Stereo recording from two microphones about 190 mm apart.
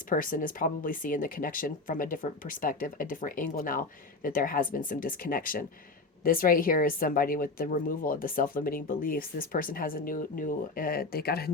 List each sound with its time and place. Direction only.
0.1 s speech: 45° left (ahead or behind)